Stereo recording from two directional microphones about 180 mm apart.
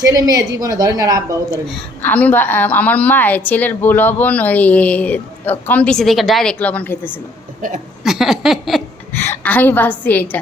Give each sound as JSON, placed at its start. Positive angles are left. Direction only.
{"t": 0.0, "sound": "a woman's voice", "side_deg": -20}
{"t": 1.6, "sound": "a woman's voice", "side_deg": 5}
{"t": 8.0, "sound": "a sound", "side_deg": 0}
{"t": 9.1, "sound": "a woman's voice", "side_deg": 10}